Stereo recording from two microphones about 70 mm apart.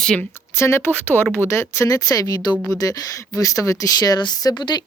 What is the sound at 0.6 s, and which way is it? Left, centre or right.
Speech, left.